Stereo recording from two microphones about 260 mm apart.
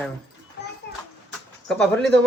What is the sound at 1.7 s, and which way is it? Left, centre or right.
Speech, centre.